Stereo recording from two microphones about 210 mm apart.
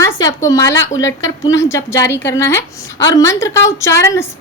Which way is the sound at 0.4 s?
15° left (ahead or behind).